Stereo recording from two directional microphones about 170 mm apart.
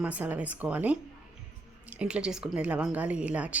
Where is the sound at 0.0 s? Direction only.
10° right (ahead or behind).